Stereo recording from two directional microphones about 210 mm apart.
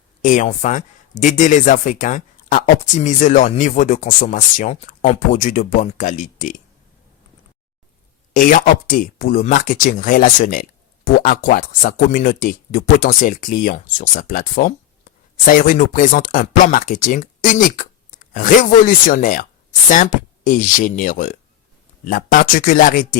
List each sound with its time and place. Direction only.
0.2 s speech: 35° left (ahead or behind)
8.3 s speech: 45° left (ahead or behind)